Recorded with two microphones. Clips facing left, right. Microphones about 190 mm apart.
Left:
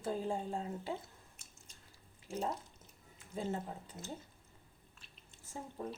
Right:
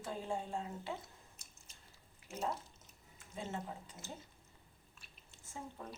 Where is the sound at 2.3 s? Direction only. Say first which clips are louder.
Left 2 dB; 30° left (ahead or behind).